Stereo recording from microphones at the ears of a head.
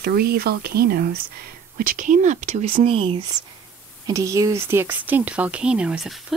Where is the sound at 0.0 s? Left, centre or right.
Right.